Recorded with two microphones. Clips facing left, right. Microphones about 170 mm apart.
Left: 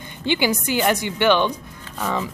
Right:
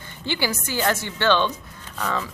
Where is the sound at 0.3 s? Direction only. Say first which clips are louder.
Left 5 dB; 20° left (ahead or behind).